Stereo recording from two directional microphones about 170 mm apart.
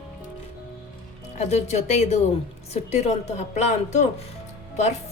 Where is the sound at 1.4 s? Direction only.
40° left (ahead or behind).